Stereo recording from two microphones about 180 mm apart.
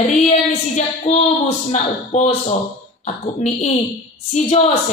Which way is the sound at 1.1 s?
35° left (ahead or behind).